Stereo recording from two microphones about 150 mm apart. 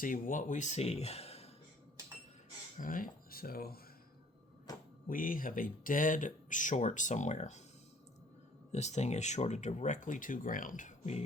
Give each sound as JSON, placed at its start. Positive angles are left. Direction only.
{"t": 0.0, "sound": "speech", "side_deg": 60}
{"t": 2.7, "sound": "speech", "side_deg": 65}
{"t": 4.7, "sound": "speech", "side_deg": 25}
{"t": 5.0, "sound": "speech", "side_deg": 65}
{"t": 8.7, "sound": "speech", "side_deg": 50}